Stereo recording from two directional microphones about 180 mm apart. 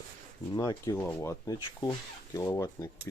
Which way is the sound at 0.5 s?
20° left (ahead or behind).